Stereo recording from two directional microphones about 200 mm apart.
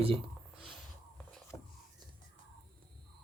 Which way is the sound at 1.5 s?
15° left (ahead or behind).